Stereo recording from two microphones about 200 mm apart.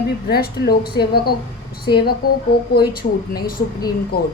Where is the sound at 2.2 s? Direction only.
50° left (ahead or behind).